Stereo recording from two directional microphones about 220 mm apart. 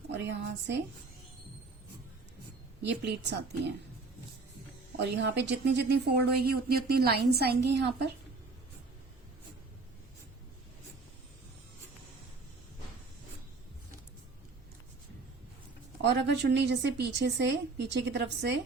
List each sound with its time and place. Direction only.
0.1 s speech: 50° right (ahead or behind)
2.8 s speech: 50° right (ahead or behind)
4.9 s speech: 50° right (ahead or behind)
16.0 s speech: 50° right (ahead or behind)